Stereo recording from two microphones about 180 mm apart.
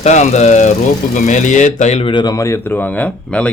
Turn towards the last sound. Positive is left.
turn(degrees=5)  # may be behind; listen again after turning